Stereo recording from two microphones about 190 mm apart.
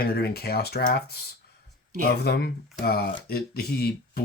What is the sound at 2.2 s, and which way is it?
Speech, 60° left (ahead or behind).